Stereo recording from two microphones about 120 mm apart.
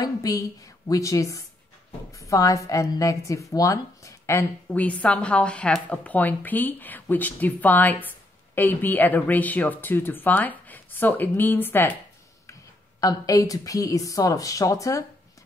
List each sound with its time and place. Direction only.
0.0 s a woman's voice: 30° left (ahead or behind)
13.0 s a woman's voice: 30° left (ahead or behind)